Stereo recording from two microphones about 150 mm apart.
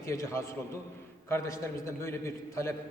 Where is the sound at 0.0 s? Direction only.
20° left (ahead or behind).